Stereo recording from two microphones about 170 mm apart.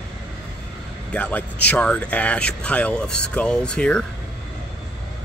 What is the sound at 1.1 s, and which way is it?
Speech, 10° left (ahead or behind).